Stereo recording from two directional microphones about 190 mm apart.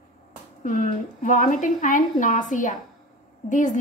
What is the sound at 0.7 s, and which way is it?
A woman's voice, 40° left (ahead or behind).